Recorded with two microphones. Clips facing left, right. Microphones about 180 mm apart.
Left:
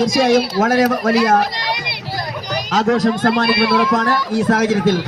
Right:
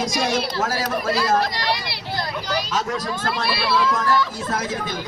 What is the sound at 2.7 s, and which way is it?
Speech, 70° left (ahead or behind).